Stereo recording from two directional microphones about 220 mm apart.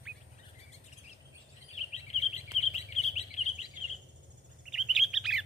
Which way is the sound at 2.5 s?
30° left (ahead or behind).